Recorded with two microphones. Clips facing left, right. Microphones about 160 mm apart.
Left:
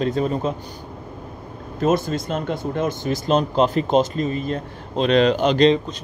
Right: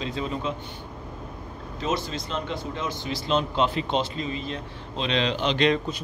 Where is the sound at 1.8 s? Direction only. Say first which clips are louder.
Left 9 dB; 50° left (ahead or behind).